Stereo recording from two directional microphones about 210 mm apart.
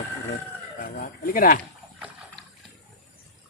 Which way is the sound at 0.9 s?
45° left (ahead or behind).